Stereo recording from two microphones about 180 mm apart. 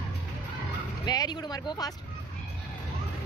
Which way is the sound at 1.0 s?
20° left (ahead or behind).